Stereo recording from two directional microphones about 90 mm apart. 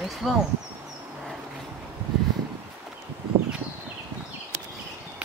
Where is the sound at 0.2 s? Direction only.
Centre (ahead or behind).